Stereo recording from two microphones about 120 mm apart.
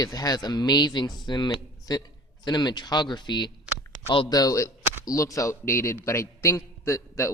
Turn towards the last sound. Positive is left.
turn(degrees=25)  # may be behind; listen again after turning